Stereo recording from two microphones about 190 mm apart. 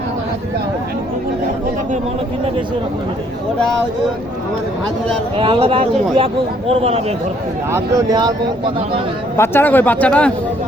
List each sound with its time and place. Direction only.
5.4 s speech: 30° right (ahead or behind)
7.7 s speech: 20° right (ahead or behind)
9.4 s a man's voice: 10° left (ahead or behind)